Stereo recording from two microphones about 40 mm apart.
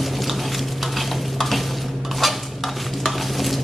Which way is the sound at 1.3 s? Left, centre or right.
Centre.